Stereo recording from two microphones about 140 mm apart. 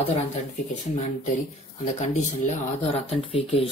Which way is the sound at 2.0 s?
60° left (ahead or behind).